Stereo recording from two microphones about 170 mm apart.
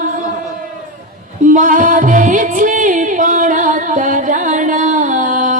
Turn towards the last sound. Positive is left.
turn(degrees=-50)  # may be behind; listen again after turning